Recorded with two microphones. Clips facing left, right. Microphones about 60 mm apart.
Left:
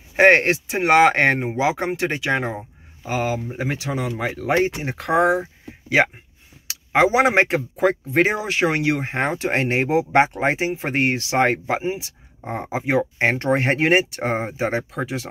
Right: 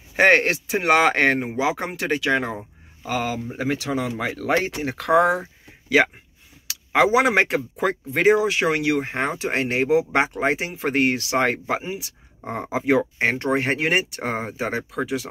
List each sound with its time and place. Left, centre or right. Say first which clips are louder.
0.1 s a man's voice: left 2 dB; left
6.7 s speech: even; left
12.6 s speech: right 1 dB; centre
13.2 s speech: left 2 dB; left